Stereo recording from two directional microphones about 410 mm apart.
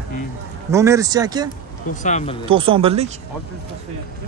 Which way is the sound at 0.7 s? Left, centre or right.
Centre.